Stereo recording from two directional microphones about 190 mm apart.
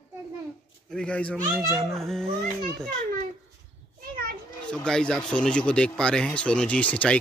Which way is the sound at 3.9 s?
50° right (ahead or behind).